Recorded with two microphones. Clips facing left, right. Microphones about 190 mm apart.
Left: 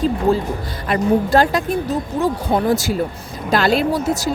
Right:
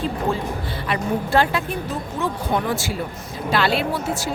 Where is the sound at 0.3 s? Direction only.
35° left (ahead or behind).